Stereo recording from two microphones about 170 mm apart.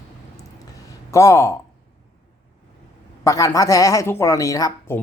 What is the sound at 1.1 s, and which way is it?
Speech, 15° left (ahead or behind).